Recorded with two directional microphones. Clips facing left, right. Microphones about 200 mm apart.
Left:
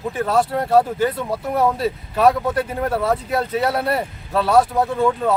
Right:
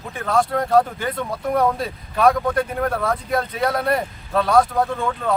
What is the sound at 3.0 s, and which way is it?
Speech, 5° left (ahead or behind).